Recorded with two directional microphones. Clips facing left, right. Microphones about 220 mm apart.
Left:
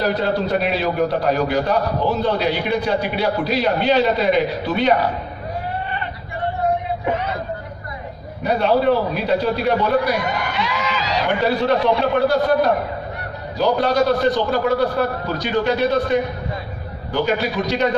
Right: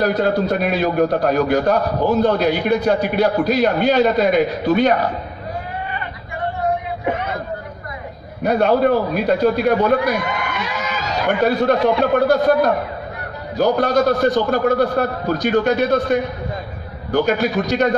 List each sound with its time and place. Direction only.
0.0 s a man's voice: 50° right (ahead or behind)
8.5 s a man's voice: 50° right (ahead or behind)
10.2 s speech: 40° left (ahead or behind)
10.5 s a man's voice: 45° right (ahead or behind)